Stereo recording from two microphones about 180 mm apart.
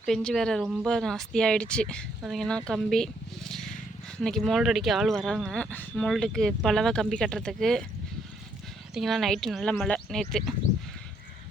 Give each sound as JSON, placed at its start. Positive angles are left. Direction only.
{"t": 0.0, "sound": "speech", "side_deg": 5}
{"t": 9.0, "sound": "speech", "side_deg": 0}